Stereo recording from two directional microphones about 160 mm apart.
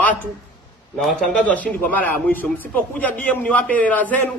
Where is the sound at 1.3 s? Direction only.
10° left (ahead or behind).